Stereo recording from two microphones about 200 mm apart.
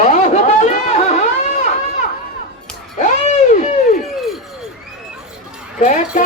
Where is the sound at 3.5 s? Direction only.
35° left (ahead or behind).